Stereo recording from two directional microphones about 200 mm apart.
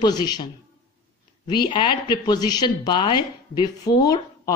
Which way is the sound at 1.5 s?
25° left (ahead or behind).